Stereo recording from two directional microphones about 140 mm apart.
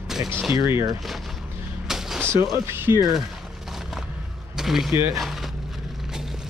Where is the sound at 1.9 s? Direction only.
5° right (ahead or behind).